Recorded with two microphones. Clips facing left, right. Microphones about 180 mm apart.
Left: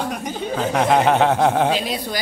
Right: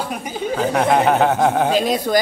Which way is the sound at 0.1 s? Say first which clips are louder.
Right 1 dB; 5° right (ahead or behind).